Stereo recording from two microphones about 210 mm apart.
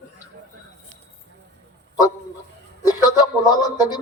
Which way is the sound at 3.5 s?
20° left (ahead or behind).